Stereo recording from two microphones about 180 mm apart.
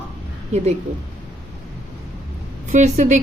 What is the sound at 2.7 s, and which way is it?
Speech, 40° right (ahead or behind).